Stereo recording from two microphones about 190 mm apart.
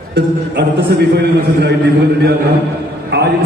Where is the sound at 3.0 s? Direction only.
60° right (ahead or behind).